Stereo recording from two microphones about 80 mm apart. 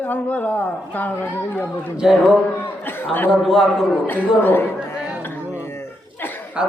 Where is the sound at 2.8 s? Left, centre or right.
Left.